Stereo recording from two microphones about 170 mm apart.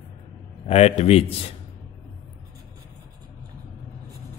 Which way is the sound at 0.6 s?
35° left (ahead or behind).